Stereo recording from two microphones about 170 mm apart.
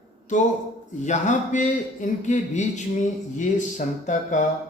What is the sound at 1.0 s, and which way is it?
A man's voice, 45° left (ahead or behind).